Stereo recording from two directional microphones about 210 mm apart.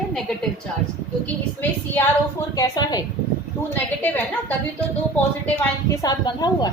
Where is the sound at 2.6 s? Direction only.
15° left (ahead or behind).